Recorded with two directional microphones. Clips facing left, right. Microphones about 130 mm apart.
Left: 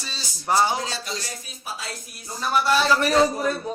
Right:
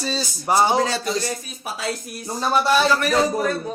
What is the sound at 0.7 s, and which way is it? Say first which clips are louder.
Speech: right 7 dB; 60° right (ahead or behind).